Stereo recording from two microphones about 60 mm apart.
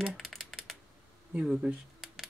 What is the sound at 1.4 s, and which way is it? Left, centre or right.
Speech, centre.